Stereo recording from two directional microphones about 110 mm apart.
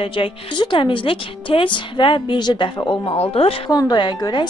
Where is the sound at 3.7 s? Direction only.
40° left (ahead or behind).